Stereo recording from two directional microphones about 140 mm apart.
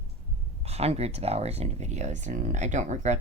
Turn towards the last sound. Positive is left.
turn(degrees=-60)  # may be behind; listen again after turning